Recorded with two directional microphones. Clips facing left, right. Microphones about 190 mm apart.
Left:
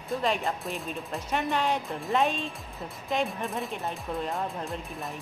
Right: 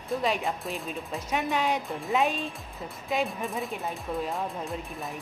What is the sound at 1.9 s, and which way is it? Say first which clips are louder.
Speech: even; centre (ahead or behind).